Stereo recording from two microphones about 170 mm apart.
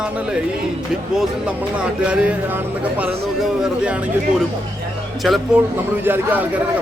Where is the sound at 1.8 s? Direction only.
5° right (ahead or behind).